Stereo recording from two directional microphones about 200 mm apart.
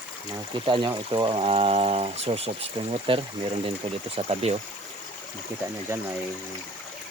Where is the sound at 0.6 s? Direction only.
25° right (ahead or behind).